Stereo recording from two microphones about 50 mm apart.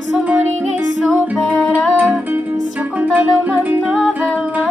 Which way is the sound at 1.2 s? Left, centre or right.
Right.